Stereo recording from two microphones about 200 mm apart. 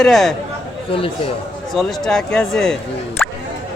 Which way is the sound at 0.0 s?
Centre (ahead or behind).